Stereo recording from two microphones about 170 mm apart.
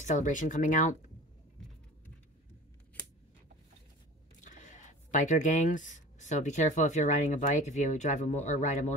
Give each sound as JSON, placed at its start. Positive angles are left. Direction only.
{"t": 0.0, "sound": "speech", "side_deg": 45}
{"t": 4.4, "sound": "speech", "side_deg": 45}